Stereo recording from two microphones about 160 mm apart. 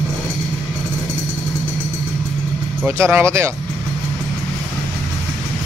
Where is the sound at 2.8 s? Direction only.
15° right (ahead or behind).